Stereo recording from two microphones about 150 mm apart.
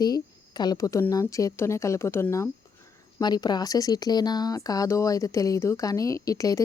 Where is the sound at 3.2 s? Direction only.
30° left (ahead or behind).